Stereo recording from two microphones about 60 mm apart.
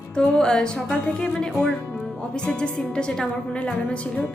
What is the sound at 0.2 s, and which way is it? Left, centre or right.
Speech, centre.